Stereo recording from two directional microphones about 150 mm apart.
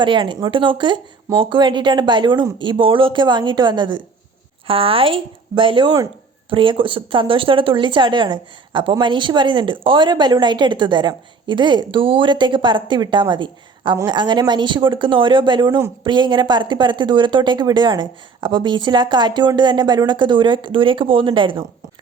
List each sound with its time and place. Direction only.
0.0 s speech: 30° right (ahead or behind)